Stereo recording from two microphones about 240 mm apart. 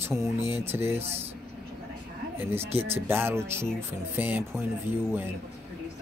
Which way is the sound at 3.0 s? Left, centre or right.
Centre.